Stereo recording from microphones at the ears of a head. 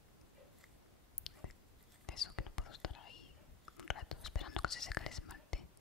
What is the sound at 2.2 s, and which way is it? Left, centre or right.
Whispering, left.